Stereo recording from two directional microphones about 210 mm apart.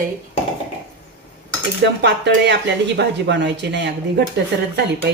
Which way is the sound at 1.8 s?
55° right (ahead or behind).